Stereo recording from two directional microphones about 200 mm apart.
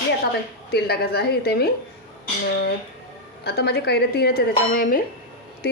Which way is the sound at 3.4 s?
55° left (ahead or behind).